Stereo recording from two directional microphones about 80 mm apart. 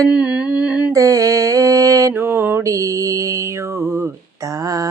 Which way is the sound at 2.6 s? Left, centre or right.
Right.